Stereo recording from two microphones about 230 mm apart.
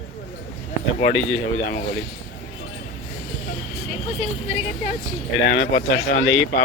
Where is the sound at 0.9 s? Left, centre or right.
Left.